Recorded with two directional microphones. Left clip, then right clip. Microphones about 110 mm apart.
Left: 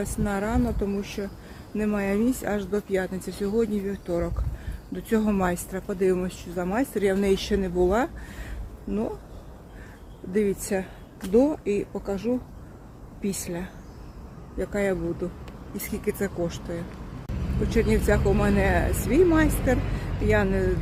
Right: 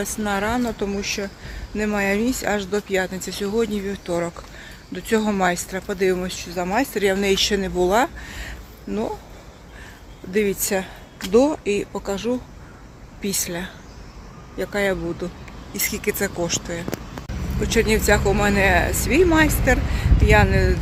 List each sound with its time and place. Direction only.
0.0 s speech: 10° left (ahead or behind)
5.3 s speech: 15° left (ahead or behind)
10.3 s speech: 5° left (ahead or behind)